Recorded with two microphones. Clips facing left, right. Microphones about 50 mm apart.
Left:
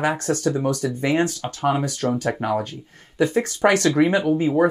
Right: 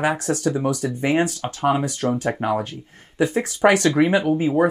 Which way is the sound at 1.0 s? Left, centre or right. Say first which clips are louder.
Right 1 dB; right.